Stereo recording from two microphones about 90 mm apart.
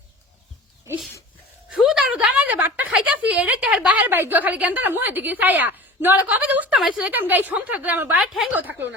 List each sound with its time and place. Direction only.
1.7 s a sound: 5° right (ahead or behind)
2.9 s a woman's voice: 15° right (ahead or behind)
8.2 s a woman's voice: 5° right (ahead or behind)
8.5 s speech: 20° right (ahead or behind)